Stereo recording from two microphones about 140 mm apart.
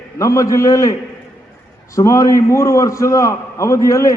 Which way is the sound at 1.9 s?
25° left (ahead or behind).